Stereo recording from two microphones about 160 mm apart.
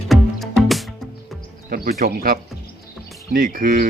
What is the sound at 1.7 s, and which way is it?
Speech, 65° right (ahead or behind).